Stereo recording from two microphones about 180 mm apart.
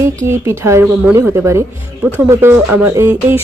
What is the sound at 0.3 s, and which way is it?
Speech, 15° right (ahead or behind).